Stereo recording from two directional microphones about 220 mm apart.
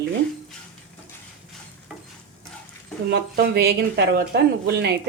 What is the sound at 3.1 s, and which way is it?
Speech, 45° right (ahead or behind).